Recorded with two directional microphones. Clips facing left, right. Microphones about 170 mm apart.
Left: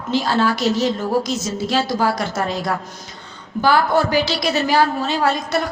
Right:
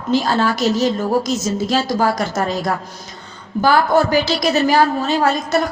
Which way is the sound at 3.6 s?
45° right (ahead or behind).